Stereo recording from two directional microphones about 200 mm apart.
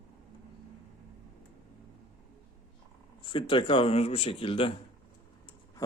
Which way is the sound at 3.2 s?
25° left (ahead or behind).